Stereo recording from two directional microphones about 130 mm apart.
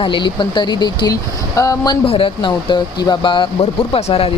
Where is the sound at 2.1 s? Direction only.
45° left (ahead or behind).